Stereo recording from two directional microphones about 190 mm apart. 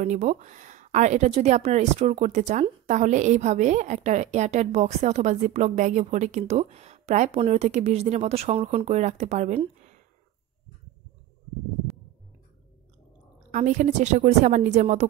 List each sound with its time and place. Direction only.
0.0 s a woman's voice: 40° right (ahead or behind)
13.5 s a woman's voice: 40° right (ahead or behind)